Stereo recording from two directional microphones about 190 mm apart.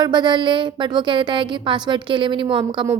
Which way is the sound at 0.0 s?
20° right (ahead or behind).